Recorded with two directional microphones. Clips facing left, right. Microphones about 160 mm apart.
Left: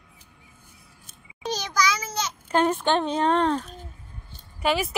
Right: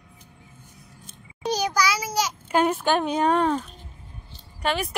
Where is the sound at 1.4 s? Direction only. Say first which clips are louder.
Right 2 dB; 10° right (ahead or behind).